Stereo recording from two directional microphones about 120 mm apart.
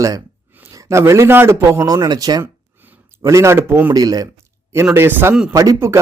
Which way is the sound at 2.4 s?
15° right (ahead or behind).